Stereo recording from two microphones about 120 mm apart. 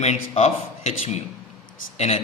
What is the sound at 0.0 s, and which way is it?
Speech, 65° left (ahead or behind).